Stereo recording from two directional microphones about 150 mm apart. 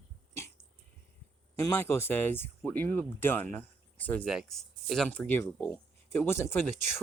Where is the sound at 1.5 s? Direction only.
15° left (ahead or behind).